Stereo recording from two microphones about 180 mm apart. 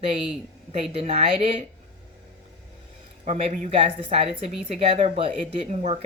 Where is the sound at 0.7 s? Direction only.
35° right (ahead or behind).